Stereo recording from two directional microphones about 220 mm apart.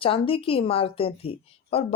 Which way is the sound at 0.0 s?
25° left (ahead or behind).